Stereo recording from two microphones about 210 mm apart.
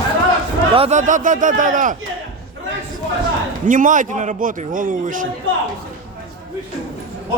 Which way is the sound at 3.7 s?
40° right (ahead or behind).